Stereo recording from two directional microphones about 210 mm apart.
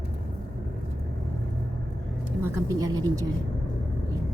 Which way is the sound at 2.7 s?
15° right (ahead or behind).